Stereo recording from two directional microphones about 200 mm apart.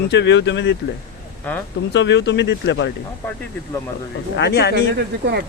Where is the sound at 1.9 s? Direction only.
60° left (ahead or behind).